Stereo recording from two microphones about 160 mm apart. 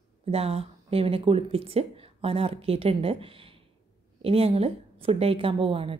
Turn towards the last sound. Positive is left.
turn(degrees=-35)  # may be behind; listen again after turning